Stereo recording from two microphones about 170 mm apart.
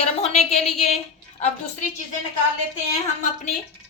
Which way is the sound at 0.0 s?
40° left (ahead or behind).